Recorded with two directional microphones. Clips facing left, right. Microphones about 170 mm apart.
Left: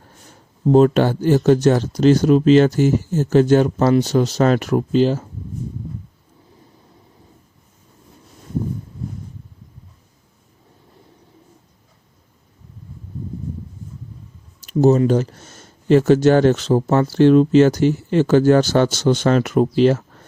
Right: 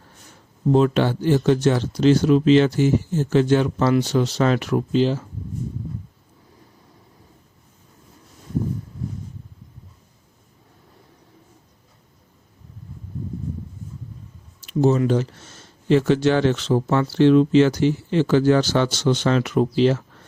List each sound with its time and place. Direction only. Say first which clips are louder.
0.7 s speech: left 4 dB; 45° left (ahead or behind)
14.7 s speech: left 4 dB; 40° left (ahead or behind)